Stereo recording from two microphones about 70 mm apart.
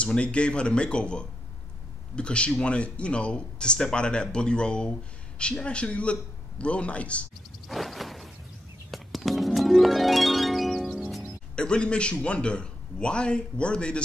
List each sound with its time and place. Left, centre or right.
0.0 s speech: centre
7.6 s a sound: centre
8.9 s music: centre
11.5 s speech: centre